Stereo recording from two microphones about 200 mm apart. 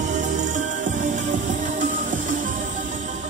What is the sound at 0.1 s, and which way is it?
Music, 40° right (ahead or behind).